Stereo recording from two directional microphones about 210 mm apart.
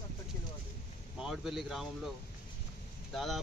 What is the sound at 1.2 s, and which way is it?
Speech, centre (ahead or behind).